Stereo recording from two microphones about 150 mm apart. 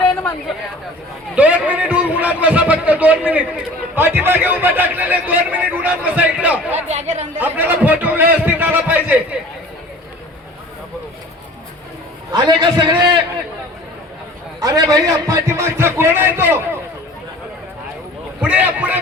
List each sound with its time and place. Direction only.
1.4 s a man's voice: 10° right (ahead or behind)
6.8 s speech: 50° right (ahead or behind)
7.3 s a man's voice: 10° right (ahead or behind)
12.3 s a man's voice: 30° right (ahead or behind)
14.6 s a man's voice: 25° right (ahead or behind)
18.3 s a man's voice: 10° right (ahead or behind)